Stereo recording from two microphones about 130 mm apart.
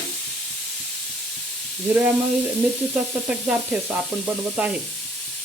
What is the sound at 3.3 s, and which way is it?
Frying, 10° right (ahead or behind).